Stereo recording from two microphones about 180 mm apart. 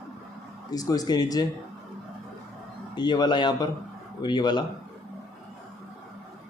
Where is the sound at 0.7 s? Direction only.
20° left (ahead or behind).